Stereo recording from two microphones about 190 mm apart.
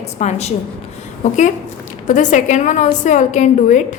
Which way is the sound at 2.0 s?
40° left (ahead or behind).